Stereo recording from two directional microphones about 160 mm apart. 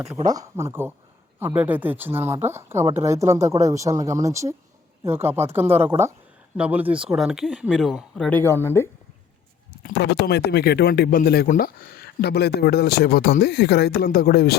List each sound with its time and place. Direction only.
0.3 s speech: 20° right (ahead or behind); by 8.9 s 15° left (ahead or behind)
9.8 s speech: 90° left